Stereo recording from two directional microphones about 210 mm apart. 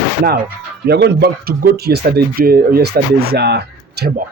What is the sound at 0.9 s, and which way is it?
Speech, 50° right (ahead or behind).